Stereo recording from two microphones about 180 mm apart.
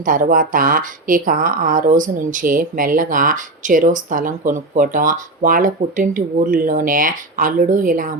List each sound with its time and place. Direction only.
0.0 s speech: 50° right (ahead or behind)